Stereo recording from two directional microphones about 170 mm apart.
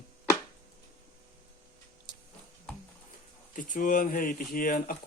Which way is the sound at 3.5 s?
50° left (ahead or behind).